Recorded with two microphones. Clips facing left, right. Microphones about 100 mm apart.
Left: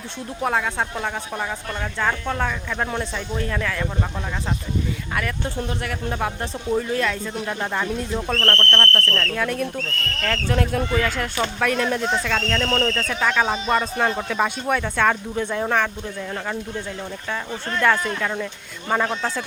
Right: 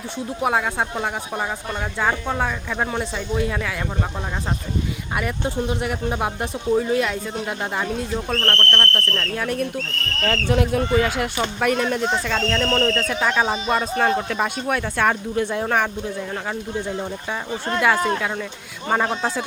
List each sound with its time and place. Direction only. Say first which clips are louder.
0.3 s a woman's voice: right 1 dB; 10° right (ahead or behind)
5.1 s a woman's voice: right 3 dB; 20° right (ahead or behind)